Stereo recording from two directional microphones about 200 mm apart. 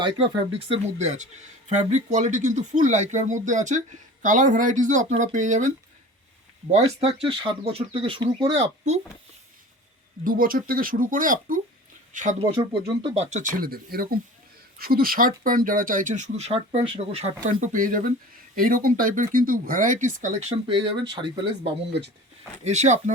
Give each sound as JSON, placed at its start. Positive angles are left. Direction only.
{"t": 0.7, "sound": "speech", "side_deg": -35}
{"t": 10.2, "sound": "speech", "side_deg": -45}
{"t": 17.4, "sound": "speech", "side_deg": -40}
{"t": 20.7, "sound": "speech", "side_deg": -25}